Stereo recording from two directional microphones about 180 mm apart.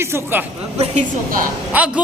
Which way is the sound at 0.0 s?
15° right (ahead or behind).